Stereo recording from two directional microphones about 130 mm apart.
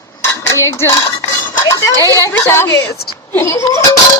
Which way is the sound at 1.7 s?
25° left (ahead or behind).